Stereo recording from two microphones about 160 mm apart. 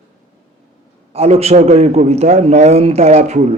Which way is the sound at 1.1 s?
40° right (ahead or behind).